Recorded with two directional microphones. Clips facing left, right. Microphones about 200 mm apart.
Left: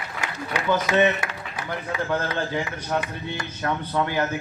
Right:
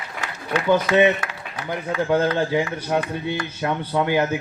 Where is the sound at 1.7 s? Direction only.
25° right (ahead or behind).